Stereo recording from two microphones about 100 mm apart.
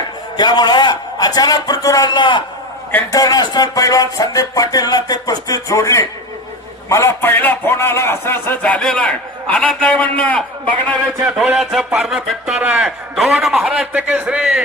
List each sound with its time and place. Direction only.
0.3 s a man's voice: 45° left (ahead or behind)
3.1 s music: 40° left (ahead or behind)
6.8 s a man's voice: 30° left (ahead or behind); by 10.9 s 15° left (ahead or behind)
11.5 s a man's voice: 5° right (ahead or behind)